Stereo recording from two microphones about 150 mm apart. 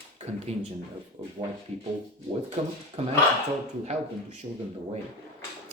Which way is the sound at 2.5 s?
40° right (ahead or behind).